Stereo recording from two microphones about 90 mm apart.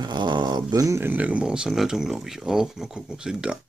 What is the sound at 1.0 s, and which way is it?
Speech, 20° right (ahead or behind).